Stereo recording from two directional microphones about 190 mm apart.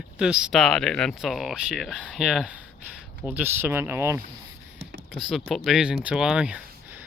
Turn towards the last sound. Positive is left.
turn(degrees=-10)  # may be behind; listen again after turning